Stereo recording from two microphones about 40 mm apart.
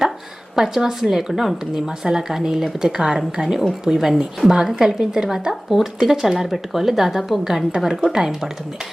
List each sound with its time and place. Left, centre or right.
0.5 s a woman's voice: centre